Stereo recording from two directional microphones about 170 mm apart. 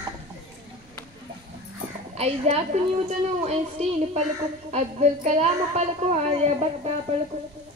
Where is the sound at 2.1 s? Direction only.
40° right (ahead or behind).